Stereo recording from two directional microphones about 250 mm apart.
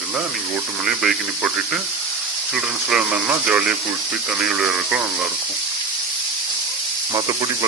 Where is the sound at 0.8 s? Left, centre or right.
Centre.